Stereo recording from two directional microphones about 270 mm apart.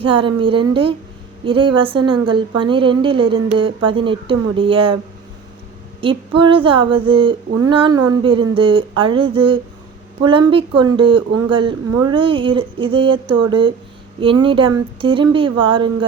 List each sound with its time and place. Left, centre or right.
0.0 s a woman's voice: centre
6.0 s a woman's voice: centre